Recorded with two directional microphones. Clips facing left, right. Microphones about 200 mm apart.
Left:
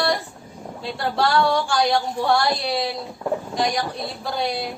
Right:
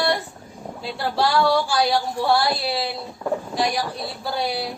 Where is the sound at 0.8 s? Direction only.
5° right (ahead or behind).